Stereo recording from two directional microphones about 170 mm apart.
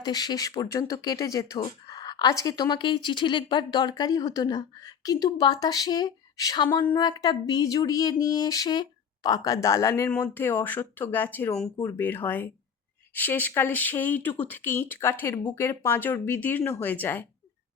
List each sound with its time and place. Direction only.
0.0 s speech: 25° left (ahead or behind)